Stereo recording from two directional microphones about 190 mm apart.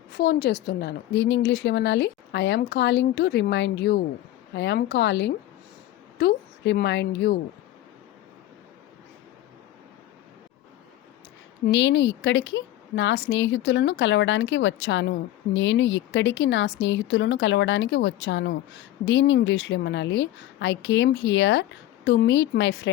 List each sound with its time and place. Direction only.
0.1 s a woman's voice: 55° left (ahead or behind)
11.6 s a woman's voice: 70° left (ahead or behind)